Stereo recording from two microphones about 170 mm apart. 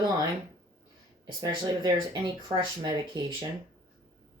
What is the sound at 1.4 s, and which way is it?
Speech, 25° right (ahead or behind).